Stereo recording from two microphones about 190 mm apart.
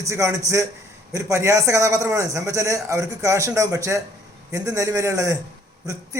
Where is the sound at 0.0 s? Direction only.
15° right (ahead or behind).